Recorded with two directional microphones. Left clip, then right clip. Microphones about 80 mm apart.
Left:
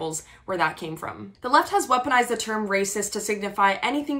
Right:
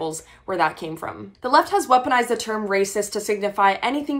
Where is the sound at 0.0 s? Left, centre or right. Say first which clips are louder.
Right 3 dB; right.